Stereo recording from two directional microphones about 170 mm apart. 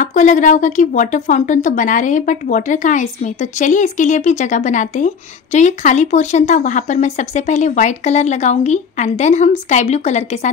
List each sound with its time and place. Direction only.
0.0 s a woman's voice: 45° left (ahead or behind)